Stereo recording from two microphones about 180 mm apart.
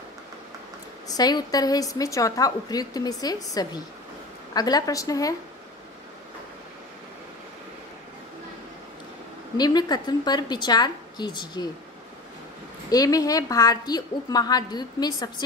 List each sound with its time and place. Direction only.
1.0 s a woman's voice: 20° left (ahead or behind)
9.6 s a woman's voice: 25° left (ahead or behind)
12.9 s a woman's voice: 20° left (ahead or behind)